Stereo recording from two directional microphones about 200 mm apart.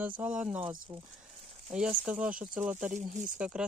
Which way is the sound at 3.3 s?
5° right (ahead or behind).